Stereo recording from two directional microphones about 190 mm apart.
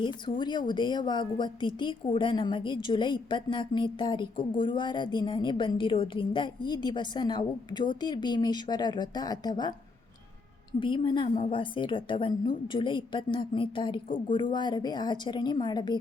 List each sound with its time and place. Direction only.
0.0 s a woman's voice: 25° left (ahead or behind)
10.8 s a woman's voice: 25° left (ahead or behind)